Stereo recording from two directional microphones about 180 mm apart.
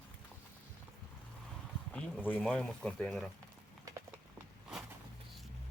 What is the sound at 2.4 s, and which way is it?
Speech, centre (ahead or behind).